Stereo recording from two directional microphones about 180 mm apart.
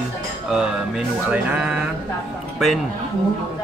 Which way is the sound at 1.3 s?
5° right (ahead or behind).